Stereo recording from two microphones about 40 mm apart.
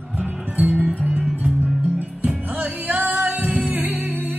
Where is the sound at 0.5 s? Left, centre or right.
Right.